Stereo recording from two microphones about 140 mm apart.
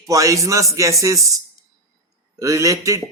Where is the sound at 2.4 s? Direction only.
20° right (ahead or behind).